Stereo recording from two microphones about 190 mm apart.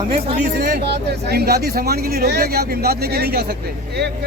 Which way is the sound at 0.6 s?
55° right (ahead or behind).